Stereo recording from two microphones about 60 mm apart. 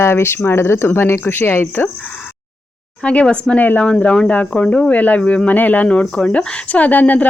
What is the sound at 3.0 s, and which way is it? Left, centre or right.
Speech, left.